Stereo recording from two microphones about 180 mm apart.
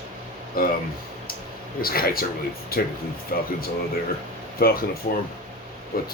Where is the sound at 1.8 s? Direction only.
55° left (ahead or behind).